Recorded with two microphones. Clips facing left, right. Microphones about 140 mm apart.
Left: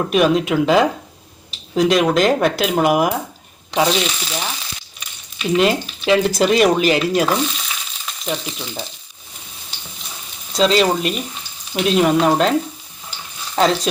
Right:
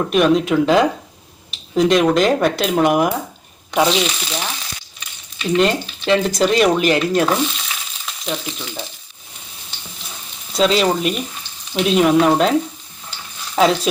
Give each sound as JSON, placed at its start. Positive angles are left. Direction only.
{"t": 0.1, "sound": "speech", "side_deg": 0}
{"t": 3.7, "sound": "frying", "side_deg": 0}
{"t": 4.9, "sound": "speech", "side_deg": 5}
{"t": 10.5, "sound": "speech", "side_deg": 0}
{"t": 13.6, "sound": "speech", "side_deg": 0}